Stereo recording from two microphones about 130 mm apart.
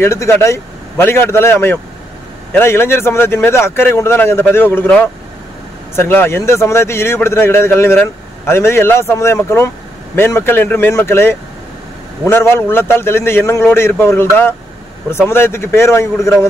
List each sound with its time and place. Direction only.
0.0 s a man's voice: 20° left (ahead or behind)